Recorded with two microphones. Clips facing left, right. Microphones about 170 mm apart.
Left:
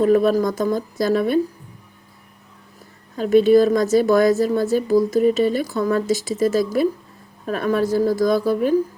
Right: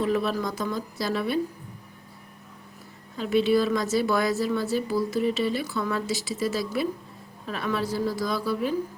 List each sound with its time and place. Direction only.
0.0 s a woman's voice: 45° left (ahead or behind)
3.2 s a woman's voice: 45° left (ahead or behind)